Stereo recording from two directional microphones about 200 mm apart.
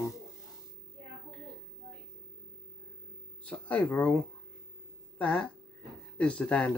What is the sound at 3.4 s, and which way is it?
Speech, 5° left (ahead or behind).